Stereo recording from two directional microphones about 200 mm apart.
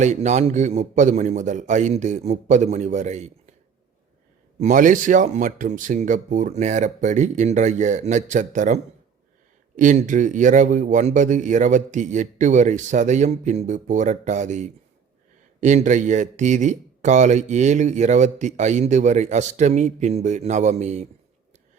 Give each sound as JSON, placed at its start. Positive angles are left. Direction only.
{"t": 0.0, "sound": "speech", "side_deg": -35}
{"t": 4.6, "sound": "speech", "side_deg": -40}